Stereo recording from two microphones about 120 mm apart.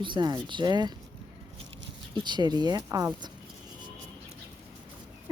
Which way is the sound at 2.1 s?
35° right (ahead or behind).